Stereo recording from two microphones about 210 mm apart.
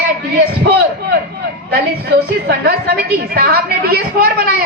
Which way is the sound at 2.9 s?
50° right (ahead or behind).